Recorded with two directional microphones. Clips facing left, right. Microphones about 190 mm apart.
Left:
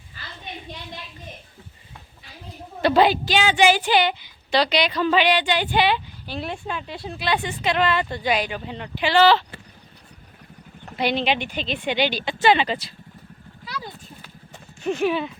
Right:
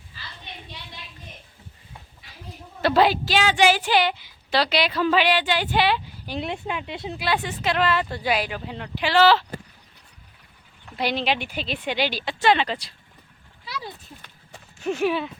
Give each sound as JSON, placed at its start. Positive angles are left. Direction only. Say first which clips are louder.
{"t": 2.8, "sound": "a woman's voice", "louder": "left 2 dB", "side_deg": 0}
{"t": 6.2, "sound": "speech", "louder": "right 3 dB", "side_deg": -20}
{"t": 7.2, "sound": "a woman's voice", "louder": "left 2 dB", "side_deg": -5}
{"t": 10.9, "sound": "a woman's voice", "louder": "left 2 dB", "side_deg": 0}
{"t": 13.7, "sound": "a sound", "louder": "even", "side_deg": 0}
{"t": 14.8, "sound": "a woman's voice", "louder": "left 1 dB", "side_deg": -5}